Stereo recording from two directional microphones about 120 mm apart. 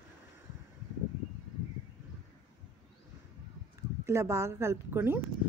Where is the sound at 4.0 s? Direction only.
20° right (ahead or behind).